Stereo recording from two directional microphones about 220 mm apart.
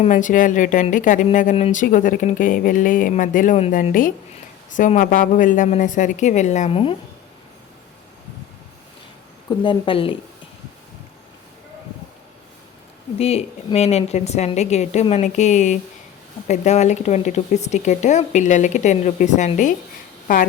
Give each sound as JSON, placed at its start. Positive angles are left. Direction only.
{"t": 0.0, "sound": "speech", "side_deg": 35}
{"t": 9.5, "sound": "speech", "side_deg": 20}
{"t": 13.1, "sound": "speech", "side_deg": 25}